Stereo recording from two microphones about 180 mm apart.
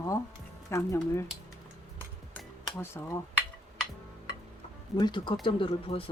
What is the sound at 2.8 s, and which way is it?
Speech, 15° left (ahead or behind).